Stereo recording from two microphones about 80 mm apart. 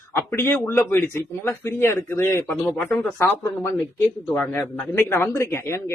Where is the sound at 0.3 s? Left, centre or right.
Left.